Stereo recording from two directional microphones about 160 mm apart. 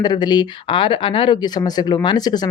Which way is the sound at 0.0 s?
25° left (ahead or behind).